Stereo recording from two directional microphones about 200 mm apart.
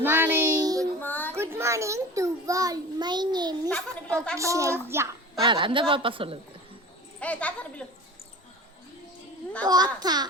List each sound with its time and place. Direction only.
0.0 s child singing: 10° right (ahead or behind)
0.9 s child singing: 10° left (ahead or behind)
1.4 s a sound: 15° right (ahead or behind)
3.7 s a sound: 5° left (ahead or behind)
4.4 s a woman's voice: 15° right (ahead or behind)
5.5 s a man's voice: 25° right (ahead or behind)
7.2 s speech: 5° left (ahead or behind)
9.6 s a man's voice: 20° right (ahead or behind)